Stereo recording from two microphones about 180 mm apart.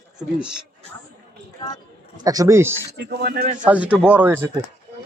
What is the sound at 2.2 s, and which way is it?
Speech, 20° right (ahead or behind).